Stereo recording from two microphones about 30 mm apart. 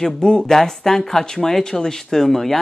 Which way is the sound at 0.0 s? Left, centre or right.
Left.